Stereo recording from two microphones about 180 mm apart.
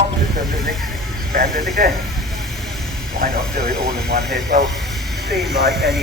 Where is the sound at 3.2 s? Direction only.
60° right (ahead or behind).